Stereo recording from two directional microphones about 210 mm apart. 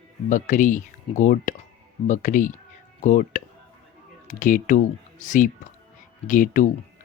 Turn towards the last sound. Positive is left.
turn(degrees=40)  # may be behind; listen again after turning